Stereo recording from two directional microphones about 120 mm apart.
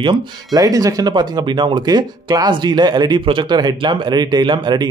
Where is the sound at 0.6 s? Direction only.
30° right (ahead or behind).